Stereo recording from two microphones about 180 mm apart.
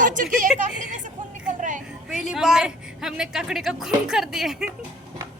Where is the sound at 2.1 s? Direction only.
5° right (ahead or behind).